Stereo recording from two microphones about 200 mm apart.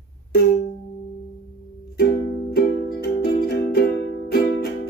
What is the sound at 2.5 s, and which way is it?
Music, 50° left (ahead or behind).